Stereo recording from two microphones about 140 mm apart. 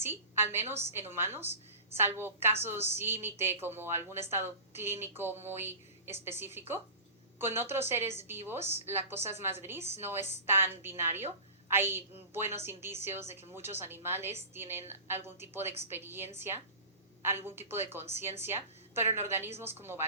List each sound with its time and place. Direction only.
0.0 s a woman's voice: 15° right (ahead or behind)